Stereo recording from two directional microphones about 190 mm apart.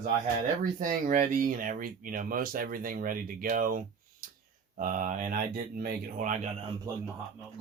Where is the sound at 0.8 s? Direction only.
45° right (ahead or behind).